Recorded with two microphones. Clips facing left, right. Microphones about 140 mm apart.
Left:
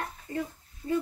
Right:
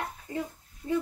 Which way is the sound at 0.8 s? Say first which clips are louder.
Even; centre (ahead or behind).